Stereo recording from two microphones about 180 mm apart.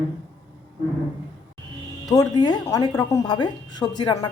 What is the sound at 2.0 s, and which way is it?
Speech, 20° left (ahead or behind).